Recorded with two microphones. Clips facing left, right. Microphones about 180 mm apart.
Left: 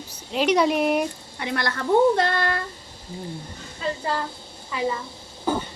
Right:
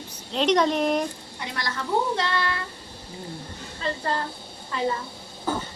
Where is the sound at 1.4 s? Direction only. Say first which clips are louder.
Left 5 dB; 60° left (ahead or behind).